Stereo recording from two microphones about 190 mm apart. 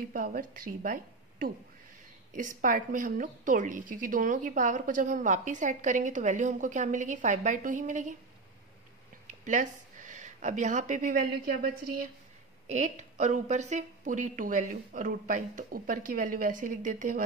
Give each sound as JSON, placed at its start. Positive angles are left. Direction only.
{"t": 0.1, "sound": "a woman's voice", "side_deg": -45}
{"t": 9.3, "sound": "speech", "side_deg": -40}
{"t": 12.6, "sound": "a woman's voice", "side_deg": -40}